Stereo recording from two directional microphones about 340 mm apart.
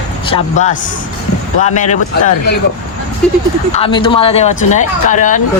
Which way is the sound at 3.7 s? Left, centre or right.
Centre.